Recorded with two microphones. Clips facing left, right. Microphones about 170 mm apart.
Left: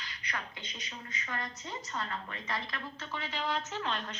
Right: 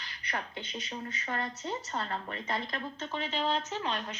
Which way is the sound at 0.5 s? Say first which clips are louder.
Right 7 dB; 60° right (ahead or behind).